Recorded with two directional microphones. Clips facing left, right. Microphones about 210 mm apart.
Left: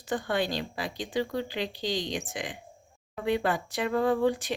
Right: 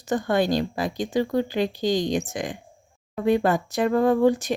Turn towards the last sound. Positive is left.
turn(degrees=-45)  # may be behind; listen again after turning